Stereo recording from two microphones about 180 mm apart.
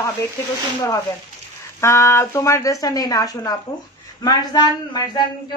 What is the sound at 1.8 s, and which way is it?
Speech, 15° left (ahead or behind).